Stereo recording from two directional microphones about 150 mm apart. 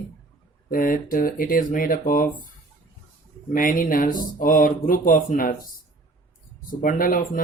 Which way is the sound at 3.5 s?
65° left (ahead or behind).